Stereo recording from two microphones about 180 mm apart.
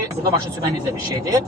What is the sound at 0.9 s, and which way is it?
Speech, 20° right (ahead or behind).